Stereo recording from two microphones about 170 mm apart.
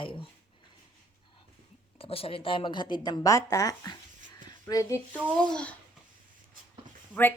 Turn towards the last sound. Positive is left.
turn(degrees=10)  # may be behind; listen again after turning